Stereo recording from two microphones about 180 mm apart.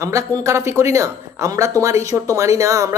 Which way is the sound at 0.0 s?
15° right (ahead or behind).